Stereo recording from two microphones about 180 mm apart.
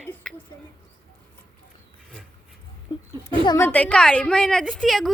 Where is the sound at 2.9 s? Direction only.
25° left (ahead or behind).